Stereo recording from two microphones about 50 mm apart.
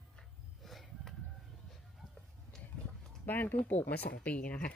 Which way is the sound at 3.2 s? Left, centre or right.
Left.